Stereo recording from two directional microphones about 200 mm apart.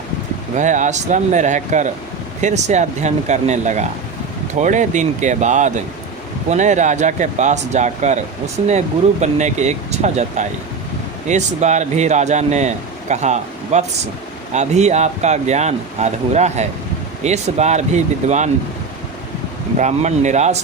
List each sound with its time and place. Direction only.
0.5 s speech: 40° right (ahead or behind)
9.2 s speech: 35° right (ahead or behind)
19.8 s speech: 35° right (ahead or behind)